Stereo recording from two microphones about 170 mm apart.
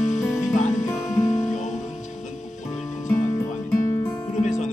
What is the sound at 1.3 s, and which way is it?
Music, 45° left (ahead or behind).